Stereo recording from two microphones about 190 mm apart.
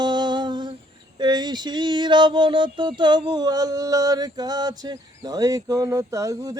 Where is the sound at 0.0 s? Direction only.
20° right (ahead or behind).